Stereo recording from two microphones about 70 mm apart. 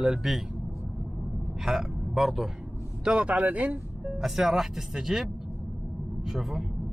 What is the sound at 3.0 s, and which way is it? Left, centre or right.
Speech, centre.